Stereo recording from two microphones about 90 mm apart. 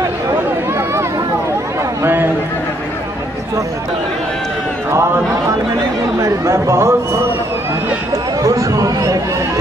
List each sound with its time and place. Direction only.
6.2 s speech: 35° right (ahead or behind)
8.4 s chatter: 40° right (ahead or behind)